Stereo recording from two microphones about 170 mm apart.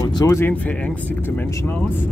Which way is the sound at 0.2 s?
15° left (ahead or behind).